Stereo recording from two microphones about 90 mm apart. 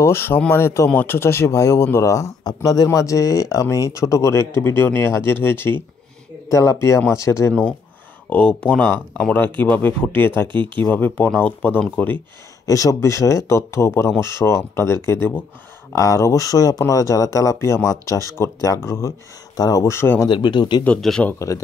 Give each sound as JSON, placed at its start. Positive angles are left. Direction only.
{"t": 0.0, "sound": "speech", "side_deg": 25}
{"t": 6.5, "sound": "speech", "side_deg": 35}
{"t": 8.3, "sound": "speech", "side_deg": 15}
{"t": 10.2, "sound": "speech", "side_deg": 25}
{"t": 10.5, "sound": "speech", "side_deg": -60}
{"t": 10.8, "sound": "speech", "side_deg": 20}
{"t": 12.6, "sound": "speech", "side_deg": 40}
{"t": 15.9, "sound": "speech", "side_deg": 35}
{"t": 19.5, "sound": "speech", "side_deg": 45}
{"t": 19.8, "sound": "speech", "side_deg": 25}
{"t": 20.2, "sound": "speech", "side_deg": 60}
{"t": 21.0, "sound": "a man's voice", "side_deg": 0}
{"t": 21.4, "sound": "speech", "side_deg": 40}